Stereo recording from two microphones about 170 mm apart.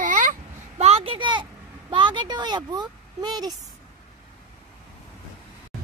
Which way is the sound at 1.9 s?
25° right (ahead or behind).